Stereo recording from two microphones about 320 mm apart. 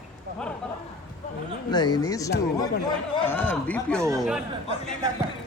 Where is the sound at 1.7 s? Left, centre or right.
Centre.